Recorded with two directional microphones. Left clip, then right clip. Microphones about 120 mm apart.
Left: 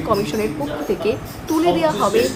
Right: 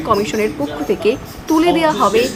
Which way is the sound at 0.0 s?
25° right (ahead or behind).